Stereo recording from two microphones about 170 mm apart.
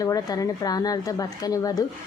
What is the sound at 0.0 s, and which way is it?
A woman's voice, 20° left (ahead or behind).